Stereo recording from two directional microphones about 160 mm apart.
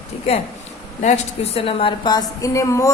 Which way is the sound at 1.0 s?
45° left (ahead or behind).